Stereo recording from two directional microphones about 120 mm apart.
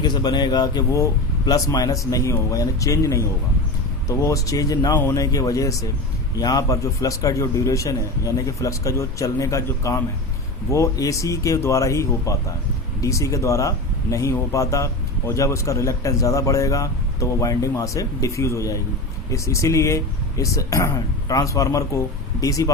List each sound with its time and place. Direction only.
0.0 s a man's voice: 35° left (ahead or behind)